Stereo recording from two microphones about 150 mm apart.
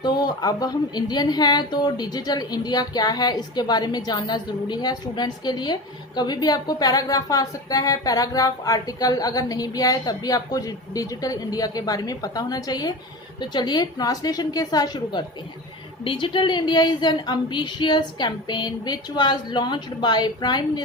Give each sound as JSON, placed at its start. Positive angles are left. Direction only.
{"t": 0.0, "sound": "a woman's voice", "side_deg": 25}